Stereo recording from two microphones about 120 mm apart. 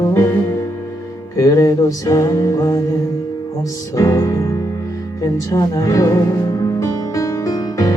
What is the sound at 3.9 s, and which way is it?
Music, 25° left (ahead or behind).